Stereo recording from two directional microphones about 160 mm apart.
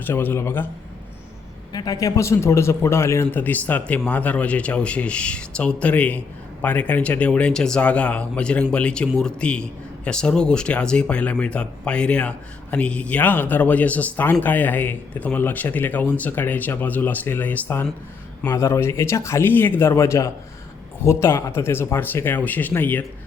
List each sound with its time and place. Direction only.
0.0 s a man's voice: 10° left (ahead or behind)
1.7 s a man's voice: 25° left (ahead or behind)